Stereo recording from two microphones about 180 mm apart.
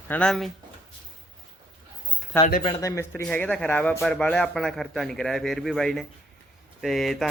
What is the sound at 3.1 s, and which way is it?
Speech, 5° left (ahead or behind).